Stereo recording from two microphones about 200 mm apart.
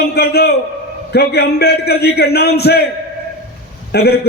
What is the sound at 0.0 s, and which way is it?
A man's voice, 55° left (ahead or behind).